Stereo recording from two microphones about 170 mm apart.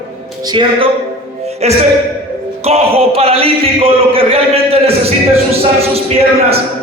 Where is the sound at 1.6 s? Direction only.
40° right (ahead or behind).